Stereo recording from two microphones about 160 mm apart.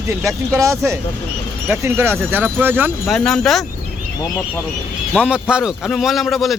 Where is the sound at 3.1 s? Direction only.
5° left (ahead or behind).